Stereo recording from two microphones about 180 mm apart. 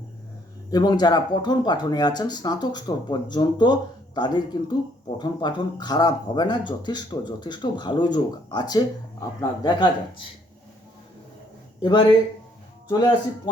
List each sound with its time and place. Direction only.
0.7 s speech: 20° left (ahead or behind)
11.8 s speech: 25° left (ahead or behind)